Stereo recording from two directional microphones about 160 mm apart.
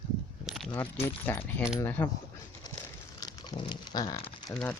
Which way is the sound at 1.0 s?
10° left (ahead or behind).